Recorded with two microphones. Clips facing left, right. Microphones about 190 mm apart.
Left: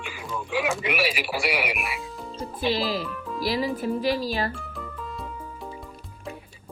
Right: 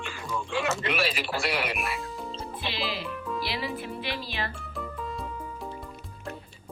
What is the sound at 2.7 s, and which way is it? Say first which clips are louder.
Speech: left 6 dB; 40° left (ahead or behind).